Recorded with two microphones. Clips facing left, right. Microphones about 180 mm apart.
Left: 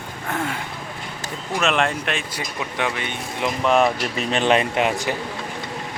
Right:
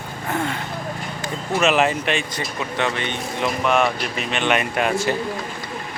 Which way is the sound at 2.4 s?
10° left (ahead or behind).